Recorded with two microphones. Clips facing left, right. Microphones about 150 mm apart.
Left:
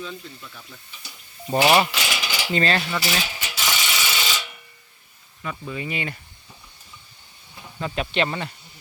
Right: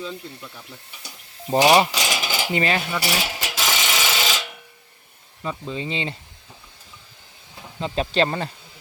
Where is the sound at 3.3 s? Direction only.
90° right.